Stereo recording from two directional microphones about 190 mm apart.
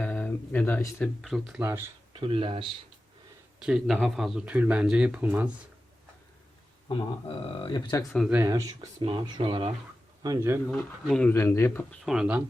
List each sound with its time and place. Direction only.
0.0 s a sound: 10° left (ahead or behind)
1.0 s speech: centre (ahead or behind)
1.6 s speech: 10° right (ahead or behind)
2.1 s speech: 25° right (ahead or behind)
3.6 s speech: centre (ahead or behind)
6.8 s speech: 30° left (ahead or behind)
8.1 s speech: centre (ahead or behind)
8.4 s speech: 15° right (ahead or behind)
10.2 s speech: 15° right (ahead or behind)
11.0 s speech: 5° left (ahead or behind)
12.0 s speech: 5° right (ahead or behind)